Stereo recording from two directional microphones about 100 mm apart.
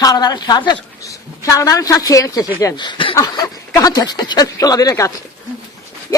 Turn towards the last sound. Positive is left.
turn(degrees=35)  # may be behind; listen again after turning